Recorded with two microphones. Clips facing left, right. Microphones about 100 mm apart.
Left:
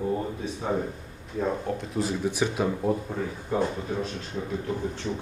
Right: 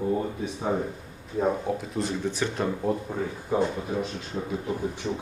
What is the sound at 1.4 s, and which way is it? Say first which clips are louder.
Speech: right 2 dB; 15° right (ahead or behind).